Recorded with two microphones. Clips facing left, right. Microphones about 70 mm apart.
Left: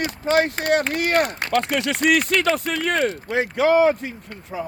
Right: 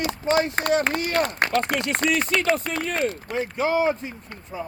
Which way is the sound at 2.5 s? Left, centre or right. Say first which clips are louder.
Left 4 dB; left.